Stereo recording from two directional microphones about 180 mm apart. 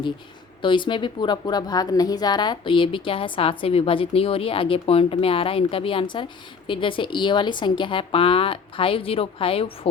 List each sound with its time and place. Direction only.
0.6 s a woman's voice: 25° left (ahead or behind)